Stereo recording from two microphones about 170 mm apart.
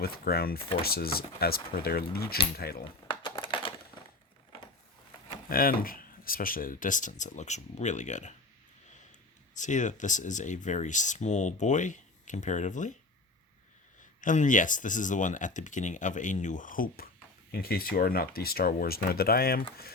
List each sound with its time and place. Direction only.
0.0 s speech: 65° left (ahead or behind)
2.8 s coin: 30° left (ahead or behind)
3.4 s a sound: 30° left (ahead or behind)
5.5 s speech: 60° left (ahead or behind)
9.6 s speech: 45° left (ahead or behind)
14.2 s speech: 50° left (ahead or behind)